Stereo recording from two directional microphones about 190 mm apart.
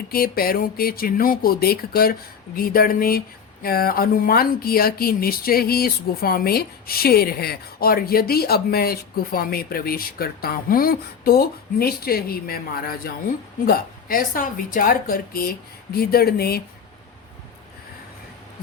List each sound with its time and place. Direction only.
0.1 s speech: 50° left (ahead or behind)